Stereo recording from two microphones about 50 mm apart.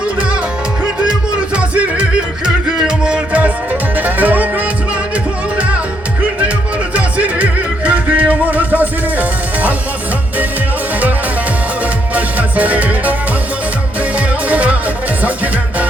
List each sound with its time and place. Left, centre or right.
1.5 s music: right
3.4 s music: right
6.9 s music: right
12.1 s music: right
14.2 s music: right